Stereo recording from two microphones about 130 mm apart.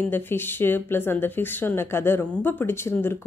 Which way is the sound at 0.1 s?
15° left (ahead or behind).